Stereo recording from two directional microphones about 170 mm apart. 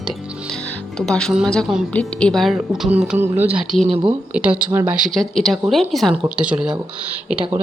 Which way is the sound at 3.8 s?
35° right (ahead or behind).